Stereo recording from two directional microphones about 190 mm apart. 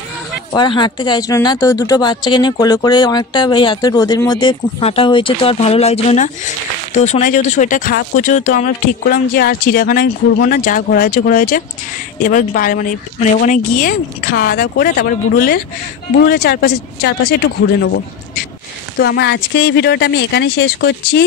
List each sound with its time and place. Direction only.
0.5 s speech: 25° left (ahead or behind); by 17.4 s 60° left (ahead or behind)
18.9 s speech: 60° left (ahead or behind)